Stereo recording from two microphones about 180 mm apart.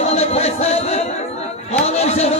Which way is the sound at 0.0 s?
35° left (ahead or behind).